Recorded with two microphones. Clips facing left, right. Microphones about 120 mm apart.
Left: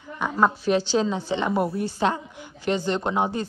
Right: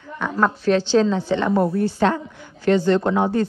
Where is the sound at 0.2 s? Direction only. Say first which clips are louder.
Right 1 dB; 10° left (ahead or behind).